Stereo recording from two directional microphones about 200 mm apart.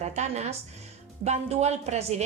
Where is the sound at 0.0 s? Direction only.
35° right (ahead or behind).